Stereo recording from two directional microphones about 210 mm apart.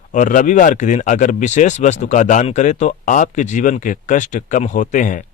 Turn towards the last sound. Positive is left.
turn(degrees=40)  # may be behind; listen again after turning